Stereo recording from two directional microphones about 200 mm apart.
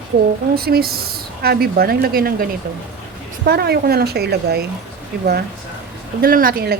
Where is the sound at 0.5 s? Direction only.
50° right (ahead or behind).